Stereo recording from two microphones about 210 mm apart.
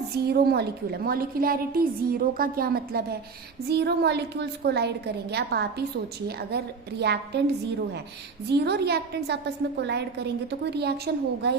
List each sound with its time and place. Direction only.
0.2 s a woman's voice: 50° right (ahead or behind)